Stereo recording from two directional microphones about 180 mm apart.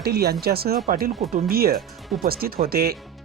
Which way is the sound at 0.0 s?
60° right (ahead or behind).